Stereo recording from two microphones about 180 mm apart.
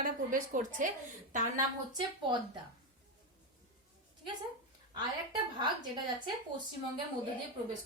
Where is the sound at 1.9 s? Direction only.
25° right (ahead or behind).